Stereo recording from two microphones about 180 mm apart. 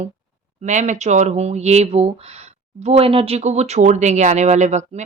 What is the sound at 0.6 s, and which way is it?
Speech, 40° right (ahead or behind).